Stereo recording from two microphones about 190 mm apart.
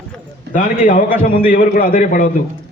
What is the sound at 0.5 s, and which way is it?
A man's voice, 45° left (ahead or behind).